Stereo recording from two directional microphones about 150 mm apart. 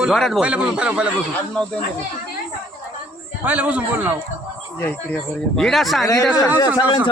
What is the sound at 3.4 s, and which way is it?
Speech, 10° right (ahead or behind).